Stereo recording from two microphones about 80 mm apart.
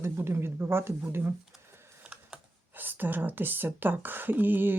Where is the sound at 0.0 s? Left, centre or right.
Right.